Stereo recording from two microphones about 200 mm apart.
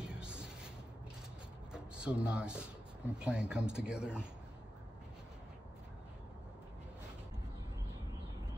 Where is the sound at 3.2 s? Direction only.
5° right (ahead or behind).